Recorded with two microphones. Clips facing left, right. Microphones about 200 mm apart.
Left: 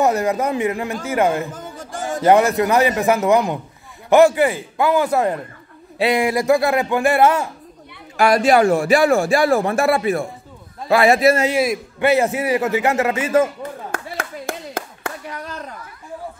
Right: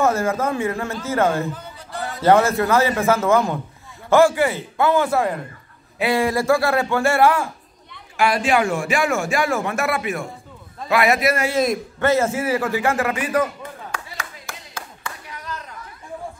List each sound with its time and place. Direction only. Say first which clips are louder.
0.0 s speech: left 2 dB; 15° left (ahead or behind)
1.5 s a sound: left 2 dB; 45° left (ahead or behind)
2.2 s speech: left 1 dB; 15° left (ahead or behind)
8.2 s a man's voice: left 5 dB; 40° left (ahead or behind)
11.5 s a man's voice: left 1 dB; 10° left (ahead or behind); by 13.5 s 25° left (ahead or behind)
13.9 s clapping: left 6 dB; 55° left (ahead or behind)